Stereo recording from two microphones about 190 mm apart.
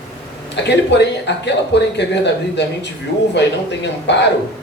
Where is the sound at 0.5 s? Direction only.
65° left (ahead or behind).